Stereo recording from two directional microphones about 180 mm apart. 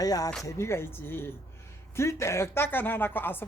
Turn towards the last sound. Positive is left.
turn(degrees=10)  # may be behind; listen again after turning